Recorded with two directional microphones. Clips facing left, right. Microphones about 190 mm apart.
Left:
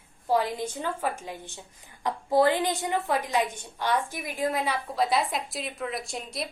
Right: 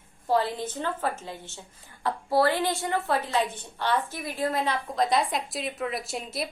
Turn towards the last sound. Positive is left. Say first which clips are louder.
# right 2 dB
turn(degrees=-5)  # may be behind; listen again after turning